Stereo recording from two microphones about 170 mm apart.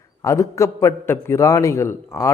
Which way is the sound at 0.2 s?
20° left (ahead or behind).